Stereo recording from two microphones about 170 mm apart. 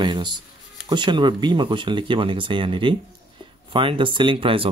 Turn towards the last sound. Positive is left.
turn(degrees=-30)  # may be behind; listen again after turning